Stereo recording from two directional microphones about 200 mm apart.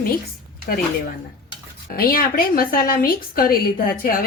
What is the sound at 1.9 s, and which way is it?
A woman's voice, 45° left (ahead or behind).